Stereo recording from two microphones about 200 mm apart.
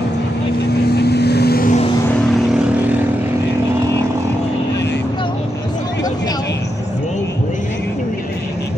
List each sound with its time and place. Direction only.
0.8 s vehicle: 55° left (ahead or behind)
2.3 s vehicle: 5° right (ahead or behind)